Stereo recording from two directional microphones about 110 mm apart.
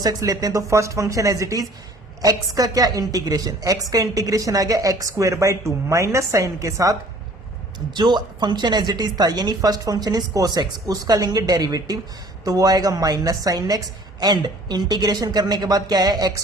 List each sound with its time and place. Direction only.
0.0 s a woman's voice: 35° right (ahead or behind)
7.9 s a woman's voice: 40° right (ahead or behind)